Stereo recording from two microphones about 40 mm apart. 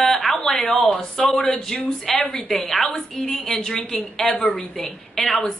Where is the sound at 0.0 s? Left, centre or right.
Centre.